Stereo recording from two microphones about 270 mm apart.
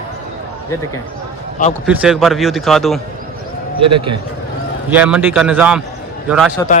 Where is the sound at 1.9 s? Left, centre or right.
Centre.